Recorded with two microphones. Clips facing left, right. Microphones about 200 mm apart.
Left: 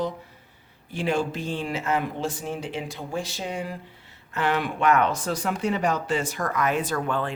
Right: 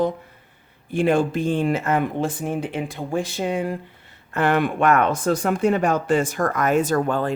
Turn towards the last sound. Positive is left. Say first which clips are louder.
# right 6 dB
turn(degrees=-45)  # may be behind; listen again after turning